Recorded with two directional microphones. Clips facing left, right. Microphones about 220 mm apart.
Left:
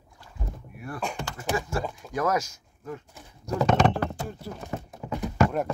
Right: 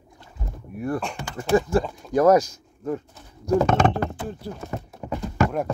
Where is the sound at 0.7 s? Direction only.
45° right (ahead or behind).